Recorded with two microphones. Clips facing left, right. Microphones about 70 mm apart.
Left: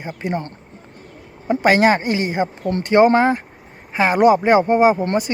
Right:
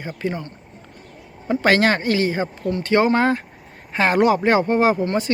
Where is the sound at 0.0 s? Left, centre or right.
Left.